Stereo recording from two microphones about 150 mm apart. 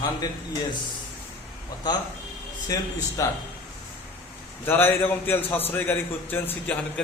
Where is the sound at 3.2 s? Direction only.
20° left (ahead or behind).